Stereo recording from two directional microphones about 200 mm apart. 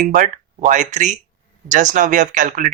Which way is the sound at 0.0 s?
40° right (ahead or behind).